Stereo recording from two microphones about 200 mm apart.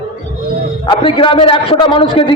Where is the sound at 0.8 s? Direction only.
25° left (ahead or behind).